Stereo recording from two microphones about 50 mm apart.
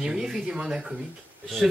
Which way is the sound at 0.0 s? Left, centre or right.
Centre.